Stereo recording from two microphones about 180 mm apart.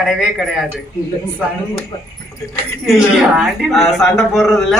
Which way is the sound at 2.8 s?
Centre (ahead or behind).